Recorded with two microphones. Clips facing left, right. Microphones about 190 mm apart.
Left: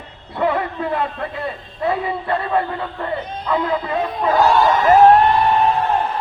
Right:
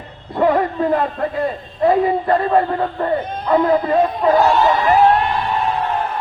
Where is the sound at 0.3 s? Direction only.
40° right (ahead or behind).